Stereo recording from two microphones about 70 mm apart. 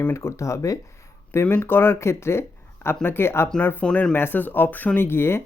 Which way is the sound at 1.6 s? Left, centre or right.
Left.